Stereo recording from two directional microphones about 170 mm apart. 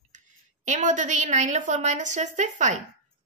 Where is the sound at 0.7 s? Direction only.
45° right (ahead or behind).